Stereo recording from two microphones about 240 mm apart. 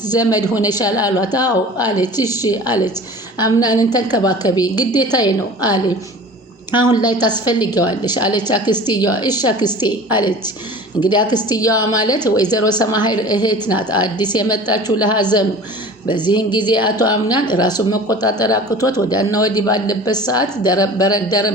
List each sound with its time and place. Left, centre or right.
0.1 s speech: centre